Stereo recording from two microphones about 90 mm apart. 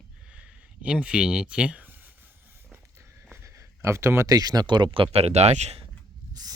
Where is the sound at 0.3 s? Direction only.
10° right (ahead or behind).